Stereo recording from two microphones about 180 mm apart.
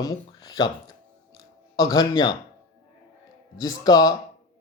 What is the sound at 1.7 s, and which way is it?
Speech, 20° left (ahead or behind).